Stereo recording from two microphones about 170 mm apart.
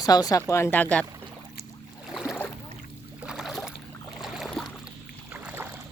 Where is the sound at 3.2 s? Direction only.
Centre (ahead or behind).